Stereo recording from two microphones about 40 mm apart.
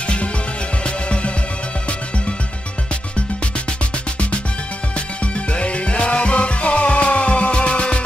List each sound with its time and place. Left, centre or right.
0.0 s music: left
2.9 s music: left
4.9 s music: left